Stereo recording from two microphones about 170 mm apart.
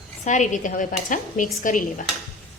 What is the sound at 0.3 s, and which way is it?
A woman's voice, 45° left (ahead or behind).